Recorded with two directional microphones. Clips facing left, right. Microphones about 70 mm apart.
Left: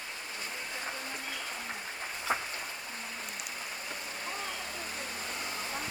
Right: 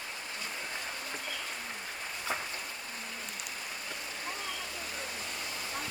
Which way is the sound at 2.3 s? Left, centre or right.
Left.